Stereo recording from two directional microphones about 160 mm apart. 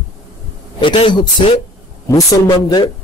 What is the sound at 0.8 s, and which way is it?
Speech, 35° left (ahead or behind).